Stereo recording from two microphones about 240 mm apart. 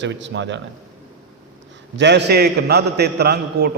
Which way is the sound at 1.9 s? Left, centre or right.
Right.